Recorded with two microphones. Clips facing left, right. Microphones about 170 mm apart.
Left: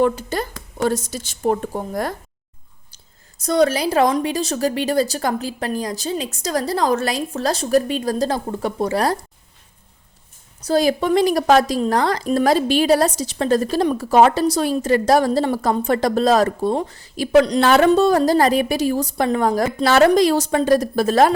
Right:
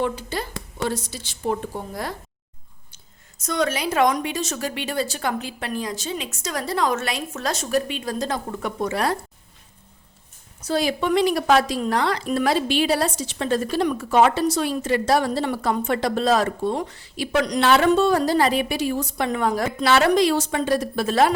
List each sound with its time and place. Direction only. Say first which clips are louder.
0.0 s speech: left 6 dB; 45° left (ahead or behind)
2.9 s speech: left 1 dB; 35° left (ahead or behind)
10.7 s speech: left 5 dB; 40° left (ahead or behind)